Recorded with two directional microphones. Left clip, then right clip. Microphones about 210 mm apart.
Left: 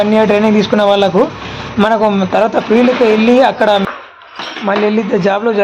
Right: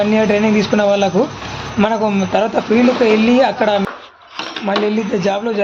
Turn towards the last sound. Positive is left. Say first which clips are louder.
# left 5 dB
turn(degrees=10)  # may be behind; listen again after turning